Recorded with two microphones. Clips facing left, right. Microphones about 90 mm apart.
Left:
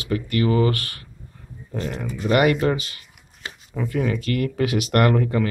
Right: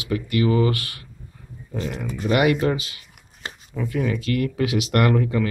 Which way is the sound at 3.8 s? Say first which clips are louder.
Left 1 dB; centre (ahead or behind).